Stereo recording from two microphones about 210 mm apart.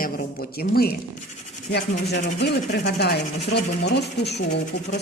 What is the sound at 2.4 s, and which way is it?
A woman's voice, 50° left (ahead or behind).